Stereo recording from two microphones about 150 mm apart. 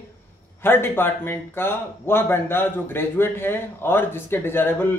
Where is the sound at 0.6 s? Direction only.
15° left (ahead or behind).